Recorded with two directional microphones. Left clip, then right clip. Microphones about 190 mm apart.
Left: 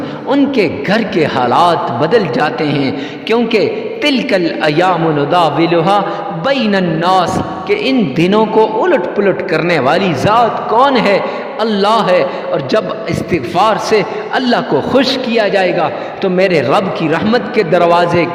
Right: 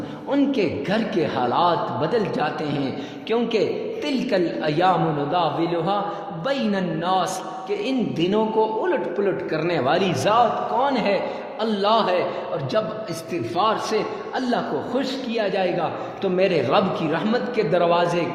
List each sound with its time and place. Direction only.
0.3 s a man's voice: 45° left (ahead or behind)
13.6 s a man's voice: 45° left (ahead or behind)